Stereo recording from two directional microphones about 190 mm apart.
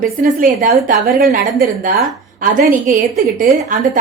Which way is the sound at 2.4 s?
45° right (ahead or behind).